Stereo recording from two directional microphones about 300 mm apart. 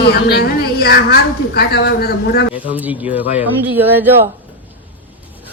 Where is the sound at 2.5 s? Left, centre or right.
Centre.